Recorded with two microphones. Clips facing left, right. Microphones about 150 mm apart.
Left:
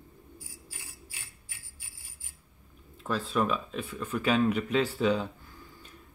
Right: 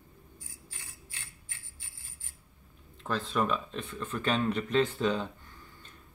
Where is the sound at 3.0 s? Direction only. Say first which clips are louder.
Left 2 dB; 5° left (ahead or behind).